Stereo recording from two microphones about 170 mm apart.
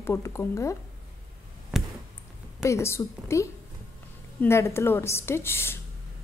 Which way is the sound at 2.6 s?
15° left (ahead or behind).